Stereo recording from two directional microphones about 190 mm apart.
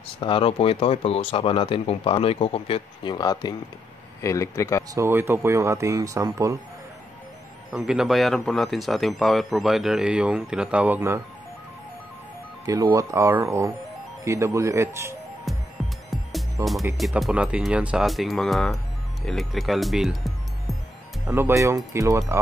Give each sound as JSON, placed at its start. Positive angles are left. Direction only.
{"t": 0.2, "sound": "speech", "side_deg": 30}
{"t": 4.9, "sound": "speech", "side_deg": -15}
{"t": 7.7, "sound": "speech", "side_deg": -5}
{"t": 12.6, "sound": "speech", "side_deg": -20}
{"t": 15.5, "sound": "music", "side_deg": 0}
{"t": 16.9, "sound": "speech", "side_deg": 0}
{"t": 21.3, "sound": "speech", "side_deg": -15}